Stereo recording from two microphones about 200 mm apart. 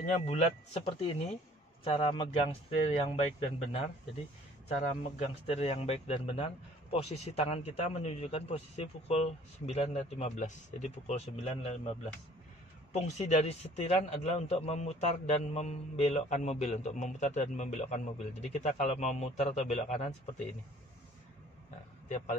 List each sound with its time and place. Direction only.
0.3 s a man's voice: 30° left (ahead or behind)
5.2 s a man's voice: 30° left (ahead or behind)
12.9 s a man's voice: 35° left (ahead or behind)